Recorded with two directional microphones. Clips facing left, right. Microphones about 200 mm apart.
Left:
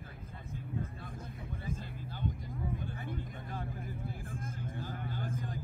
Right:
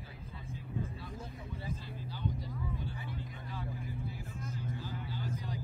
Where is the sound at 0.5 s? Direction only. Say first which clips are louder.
Even; 50° left (ahead or behind).